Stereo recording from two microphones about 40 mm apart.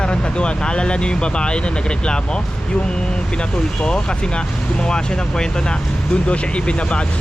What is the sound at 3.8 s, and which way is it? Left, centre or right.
Speech, centre.